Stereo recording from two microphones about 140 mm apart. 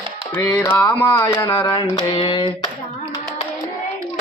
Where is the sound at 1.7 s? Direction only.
35° left (ahead or behind).